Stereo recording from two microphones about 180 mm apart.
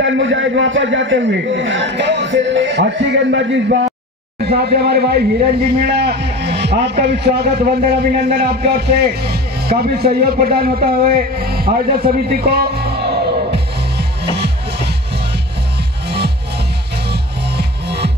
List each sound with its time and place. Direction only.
0.0 s a man's voice: 90° right
4.5 s a man's voice: 65° right (ahead or behind)
17.1 s music: 65° right (ahead or behind)